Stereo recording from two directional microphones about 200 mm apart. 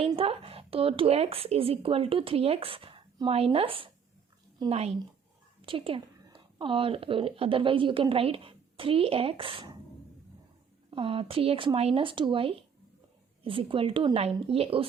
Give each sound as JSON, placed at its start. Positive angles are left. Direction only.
{"t": 0.1, "sound": "a woman's voice", "side_deg": -30}
{"t": 10.9, "sound": "speech", "side_deg": -25}